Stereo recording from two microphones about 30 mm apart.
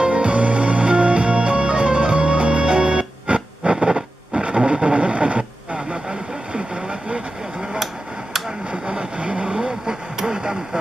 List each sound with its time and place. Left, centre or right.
0.0 s music: right
3.8 s a sound: right
4.4 s a sound: right
4.7 s radio: right
6.0 s vehicle: right
8.8 s vehicle: right